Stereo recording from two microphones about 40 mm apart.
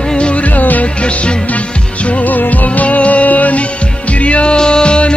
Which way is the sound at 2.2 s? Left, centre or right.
Left.